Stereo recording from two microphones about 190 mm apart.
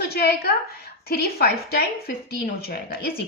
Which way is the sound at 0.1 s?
55° left (ahead or behind).